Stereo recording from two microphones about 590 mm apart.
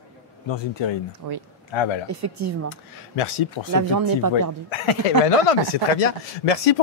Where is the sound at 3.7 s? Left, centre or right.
Right.